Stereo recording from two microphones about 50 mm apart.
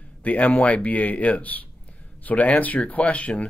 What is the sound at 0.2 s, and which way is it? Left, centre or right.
Speech, left.